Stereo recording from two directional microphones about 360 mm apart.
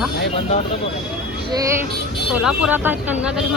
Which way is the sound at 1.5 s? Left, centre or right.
Centre.